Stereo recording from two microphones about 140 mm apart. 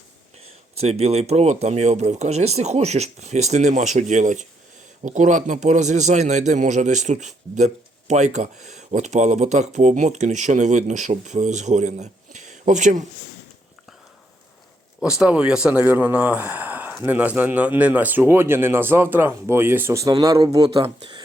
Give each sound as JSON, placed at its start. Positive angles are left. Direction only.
{"t": 0.8, "sound": "a man's voice", "side_deg": -50}
{"t": 15.0, "sound": "speech", "side_deg": -5}
{"t": 20.8, "sound": "speech", "side_deg": -35}